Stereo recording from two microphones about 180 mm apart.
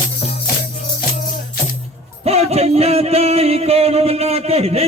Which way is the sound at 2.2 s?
35° right (ahead or behind).